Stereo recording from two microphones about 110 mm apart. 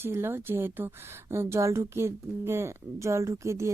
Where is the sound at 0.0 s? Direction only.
20° right (ahead or behind).